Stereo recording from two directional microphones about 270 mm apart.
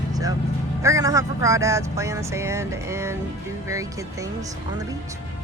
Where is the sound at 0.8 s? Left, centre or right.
Centre.